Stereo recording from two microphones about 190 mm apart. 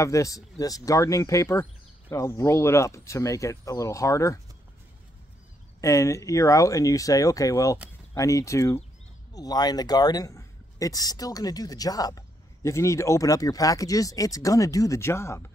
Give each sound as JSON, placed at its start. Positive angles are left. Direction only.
{"t": 0.0, "sound": "speech", "side_deg": 15}
{"t": 5.8, "sound": "speech", "side_deg": 15}